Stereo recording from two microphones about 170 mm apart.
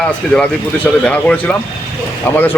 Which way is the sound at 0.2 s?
Centre (ahead or behind).